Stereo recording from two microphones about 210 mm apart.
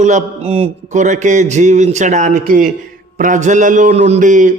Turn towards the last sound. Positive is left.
turn(degrees=-35)  # may be behind; listen again after turning